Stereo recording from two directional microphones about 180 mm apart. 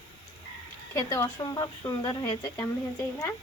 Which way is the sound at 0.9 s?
20° left (ahead or behind).